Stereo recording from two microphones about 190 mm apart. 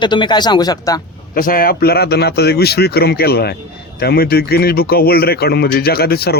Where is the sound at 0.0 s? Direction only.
25° left (ahead or behind).